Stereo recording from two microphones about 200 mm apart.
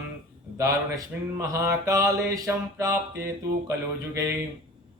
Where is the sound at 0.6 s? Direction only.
15° right (ahead or behind).